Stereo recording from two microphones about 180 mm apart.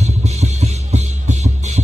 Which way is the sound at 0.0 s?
35° right (ahead or behind).